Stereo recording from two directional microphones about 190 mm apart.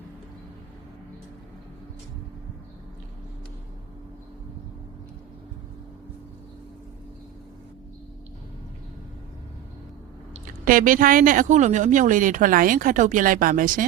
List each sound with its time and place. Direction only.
10.3 s speech: 45° right (ahead or behind)